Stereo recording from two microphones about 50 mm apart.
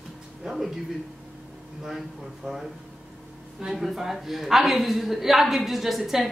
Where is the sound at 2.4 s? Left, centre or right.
Centre.